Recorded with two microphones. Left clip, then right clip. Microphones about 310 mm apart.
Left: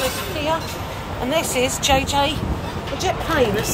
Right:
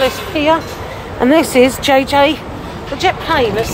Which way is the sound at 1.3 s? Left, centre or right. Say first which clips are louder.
Right 10 dB; centre.